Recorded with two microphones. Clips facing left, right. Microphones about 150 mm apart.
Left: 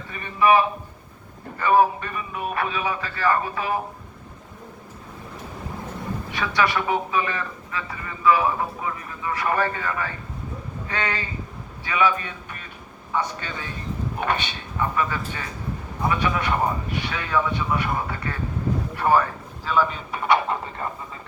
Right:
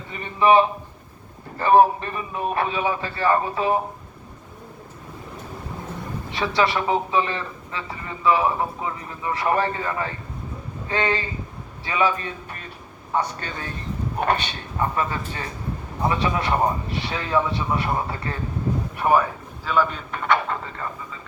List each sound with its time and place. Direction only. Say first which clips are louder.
0.1 s a man's voice: right 1 dB; 25° right (ahead or behind)
6.3 s a man's voice: right 2 dB; 25° right (ahead or behind)
18.9 s speech: even; 15° right (ahead or behind)
19.6 s speech: even; 5° left (ahead or behind)